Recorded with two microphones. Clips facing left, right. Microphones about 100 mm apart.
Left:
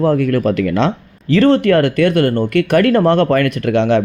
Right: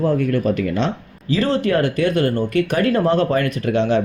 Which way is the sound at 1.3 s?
65° left (ahead or behind).